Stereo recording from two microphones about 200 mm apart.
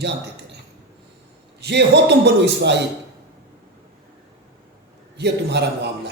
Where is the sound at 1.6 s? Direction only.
60° right (ahead or behind).